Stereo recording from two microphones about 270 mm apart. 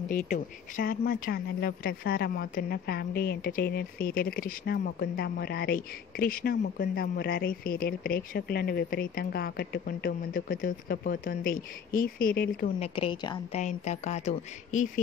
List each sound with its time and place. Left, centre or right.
0.3 s a woman's voice: left